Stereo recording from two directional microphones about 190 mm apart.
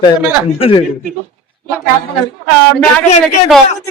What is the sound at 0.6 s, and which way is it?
Speech, 25° left (ahead or behind).